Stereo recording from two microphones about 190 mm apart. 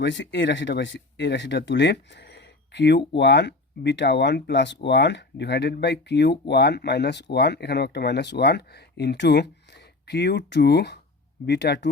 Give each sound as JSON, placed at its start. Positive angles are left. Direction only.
{"t": 0.0, "sound": "speech", "side_deg": 70}